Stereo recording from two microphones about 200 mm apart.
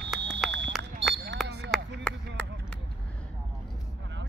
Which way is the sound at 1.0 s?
65° right (ahead or behind).